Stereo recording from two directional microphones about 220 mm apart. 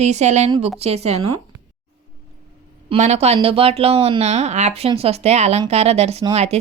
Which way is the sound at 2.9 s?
30° right (ahead or behind).